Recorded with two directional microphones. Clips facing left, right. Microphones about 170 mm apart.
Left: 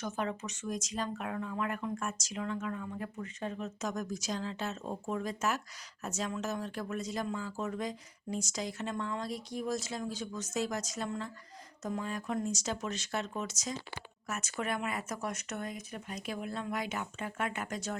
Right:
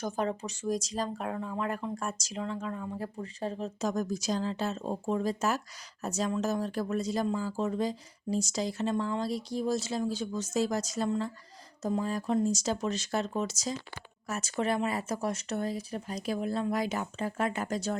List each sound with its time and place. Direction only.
0.0 s speech: 35° right (ahead or behind)